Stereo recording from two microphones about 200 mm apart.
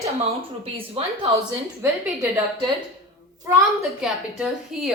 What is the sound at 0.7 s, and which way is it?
Speech, 30° right (ahead or behind).